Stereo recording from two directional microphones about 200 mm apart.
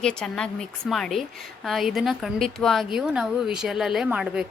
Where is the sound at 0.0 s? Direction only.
5° left (ahead or behind).